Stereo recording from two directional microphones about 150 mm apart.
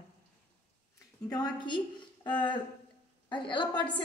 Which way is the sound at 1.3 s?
30° left (ahead or behind).